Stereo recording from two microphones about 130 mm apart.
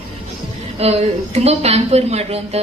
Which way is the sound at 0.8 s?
50° right (ahead or behind).